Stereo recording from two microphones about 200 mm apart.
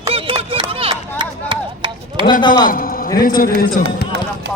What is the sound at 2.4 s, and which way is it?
Speech, 20° left (ahead or behind).